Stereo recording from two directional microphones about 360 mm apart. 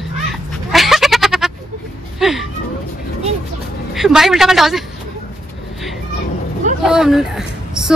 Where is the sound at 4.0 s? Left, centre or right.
Centre.